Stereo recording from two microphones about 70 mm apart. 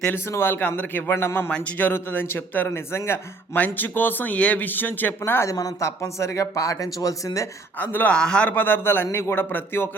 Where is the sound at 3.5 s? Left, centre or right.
Left.